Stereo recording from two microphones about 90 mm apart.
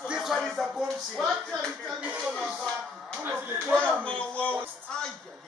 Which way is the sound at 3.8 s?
15° left (ahead or behind).